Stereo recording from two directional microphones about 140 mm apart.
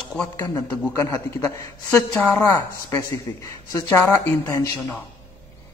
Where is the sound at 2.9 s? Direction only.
20° left (ahead or behind).